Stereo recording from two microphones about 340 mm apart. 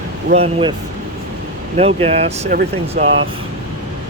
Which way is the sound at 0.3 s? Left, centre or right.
Centre.